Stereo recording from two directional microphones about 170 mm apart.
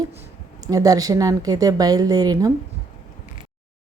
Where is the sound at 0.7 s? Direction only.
20° right (ahead or behind).